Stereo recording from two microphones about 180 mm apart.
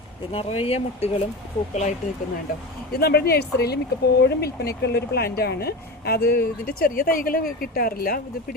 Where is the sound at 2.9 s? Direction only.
60° left (ahead or behind).